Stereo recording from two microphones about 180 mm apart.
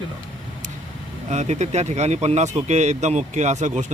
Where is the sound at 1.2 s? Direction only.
40° right (ahead or behind).